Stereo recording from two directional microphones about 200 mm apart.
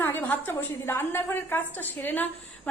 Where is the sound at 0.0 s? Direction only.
10° left (ahead or behind).